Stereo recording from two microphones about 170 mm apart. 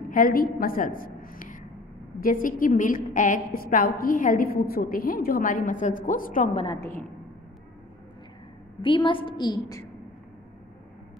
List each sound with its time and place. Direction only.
0.1 s a woman's voice: 60° left (ahead or behind)
6.5 s a woman's voice: 30° left (ahead or behind)
8.8 s a woman's voice: 30° left (ahead or behind)